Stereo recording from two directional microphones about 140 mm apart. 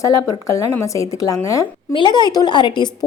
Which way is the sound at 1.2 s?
25° left (ahead or behind).